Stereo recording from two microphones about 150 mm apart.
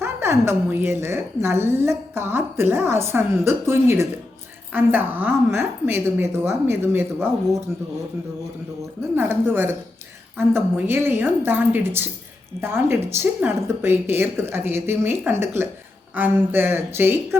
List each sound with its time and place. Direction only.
0.0 s a woman's voice: 15° right (ahead or behind)
9.1 s a woman's voice: 15° right (ahead or behind)